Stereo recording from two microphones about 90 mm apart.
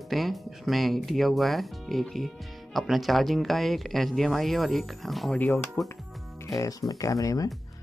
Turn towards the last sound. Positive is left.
turn(degrees=40)  # may be behind; listen again after turning